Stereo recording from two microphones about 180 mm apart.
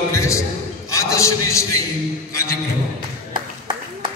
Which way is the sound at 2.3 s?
15° left (ahead or behind).